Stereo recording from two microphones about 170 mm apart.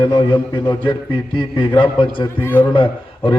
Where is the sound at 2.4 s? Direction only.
10° left (ahead or behind).